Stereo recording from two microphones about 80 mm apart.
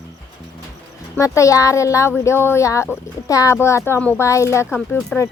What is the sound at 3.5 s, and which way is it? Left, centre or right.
Speech, left.